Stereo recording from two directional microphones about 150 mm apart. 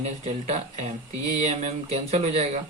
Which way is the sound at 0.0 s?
45° right (ahead or behind).